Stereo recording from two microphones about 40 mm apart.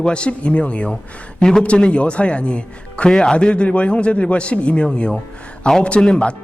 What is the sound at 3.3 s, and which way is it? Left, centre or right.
A man's voice, left.